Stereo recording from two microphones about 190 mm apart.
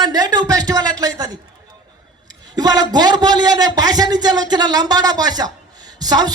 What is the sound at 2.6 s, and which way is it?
A man's voice, 20° right (ahead or behind).